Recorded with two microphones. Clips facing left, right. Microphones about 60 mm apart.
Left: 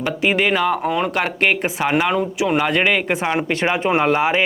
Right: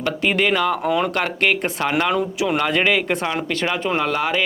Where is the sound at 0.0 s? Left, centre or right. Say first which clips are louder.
Left 1 dB; centre.